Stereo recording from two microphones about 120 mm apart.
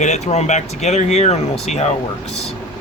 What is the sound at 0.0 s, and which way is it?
Speech, 70° left (ahead or behind).